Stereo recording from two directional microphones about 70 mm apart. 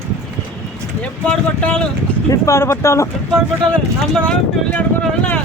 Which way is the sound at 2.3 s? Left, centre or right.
Left.